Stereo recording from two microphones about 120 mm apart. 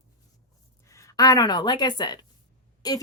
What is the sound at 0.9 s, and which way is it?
Speech, 25° left (ahead or behind).